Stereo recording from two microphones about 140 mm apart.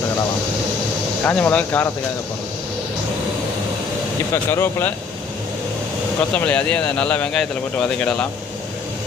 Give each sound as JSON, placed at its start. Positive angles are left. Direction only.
{"t": 1.2, "sound": "speech", "side_deg": 10}
{"t": 4.4, "sound": "speech", "side_deg": 15}
{"t": 6.3, "sound": "speech", "side_deg": 10}